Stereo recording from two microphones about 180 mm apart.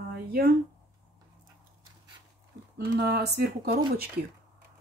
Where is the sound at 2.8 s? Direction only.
60° right (ahead or behind).